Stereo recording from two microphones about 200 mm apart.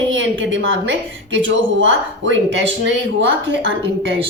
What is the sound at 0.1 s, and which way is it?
A woman's voice, 70° right (ahead or behind).